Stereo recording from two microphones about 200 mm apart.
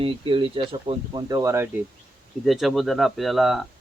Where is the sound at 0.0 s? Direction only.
25° right (ahead or behind).